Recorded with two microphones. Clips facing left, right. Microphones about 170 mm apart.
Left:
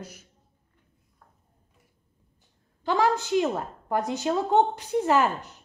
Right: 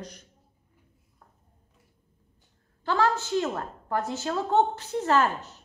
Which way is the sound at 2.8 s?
15° left (ahead or behind).